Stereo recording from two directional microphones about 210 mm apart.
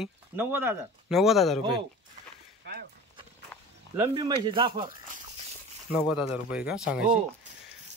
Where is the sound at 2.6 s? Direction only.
50° right (ahead or behind).